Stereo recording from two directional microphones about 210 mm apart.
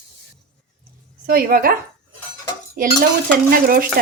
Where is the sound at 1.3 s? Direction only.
45° right (ahead or behind).